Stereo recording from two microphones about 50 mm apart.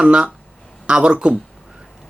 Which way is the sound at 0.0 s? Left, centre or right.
Centre.